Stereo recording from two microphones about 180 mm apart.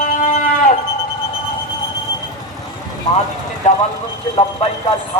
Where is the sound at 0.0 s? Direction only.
45° left (ahead or behind).